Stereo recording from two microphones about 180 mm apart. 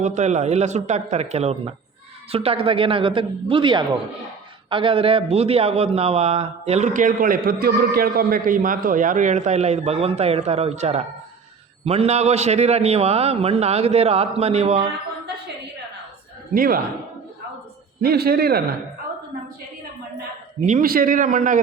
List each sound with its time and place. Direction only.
0.0 s a man's voice: 40° right (ahead or behind)
16.6 s a man's voice: 55° right (ahead or behind)
18.0 s a man's voice: 60° right (ahead or behind)
20.7 s a man's voice: 50° right (ahead or behind)